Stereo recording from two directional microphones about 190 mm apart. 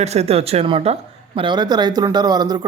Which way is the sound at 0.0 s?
35° right (ahead or behind).